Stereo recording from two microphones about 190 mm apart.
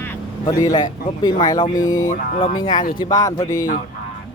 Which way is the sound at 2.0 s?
40° left (ahead or behind).